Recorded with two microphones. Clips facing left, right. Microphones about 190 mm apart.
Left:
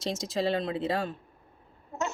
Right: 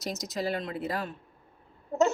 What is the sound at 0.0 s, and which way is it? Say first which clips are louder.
Speech: left 3 dB; 30° left (ahead or behind).